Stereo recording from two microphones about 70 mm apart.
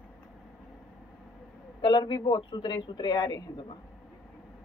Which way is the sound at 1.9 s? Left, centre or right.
Left.